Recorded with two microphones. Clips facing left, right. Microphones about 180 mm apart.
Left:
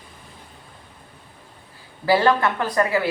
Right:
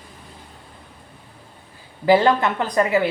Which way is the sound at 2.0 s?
20° right (ahead or behind).